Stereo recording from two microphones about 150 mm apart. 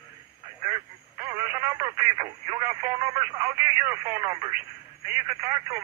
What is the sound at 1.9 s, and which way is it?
Speech, 25° right (ahead or behind).